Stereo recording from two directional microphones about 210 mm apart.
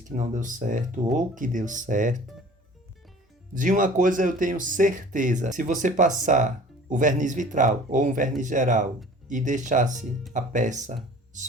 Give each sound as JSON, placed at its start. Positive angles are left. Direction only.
{"t": 0.2, "sound": "speech", "side_deg": -40}
{"t": 3.5, "sound": "speech", "side_deg": -40}